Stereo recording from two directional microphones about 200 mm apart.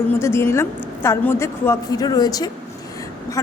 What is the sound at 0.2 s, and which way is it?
A woman's voice, 15° left (ahead or behind).